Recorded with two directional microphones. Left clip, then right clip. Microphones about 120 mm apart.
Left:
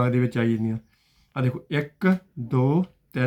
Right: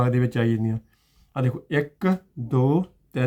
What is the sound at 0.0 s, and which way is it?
Speech, 40° right (ahead or behind).